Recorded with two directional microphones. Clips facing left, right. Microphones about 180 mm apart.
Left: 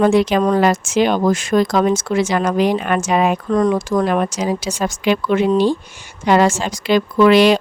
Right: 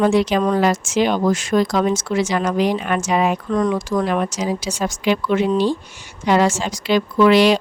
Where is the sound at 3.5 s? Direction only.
40° left (ahead or behind).